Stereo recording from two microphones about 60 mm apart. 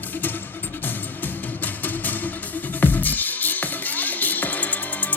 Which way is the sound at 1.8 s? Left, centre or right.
Left.